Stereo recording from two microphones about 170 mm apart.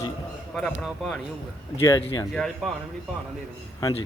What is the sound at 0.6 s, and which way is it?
Speech, 5° left (ahead or behind).